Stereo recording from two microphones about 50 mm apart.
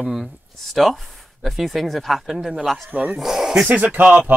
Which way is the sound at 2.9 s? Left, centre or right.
Right.